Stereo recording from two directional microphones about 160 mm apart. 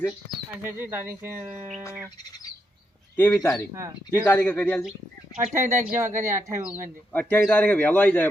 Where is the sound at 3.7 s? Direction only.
15° right (ahead or behind).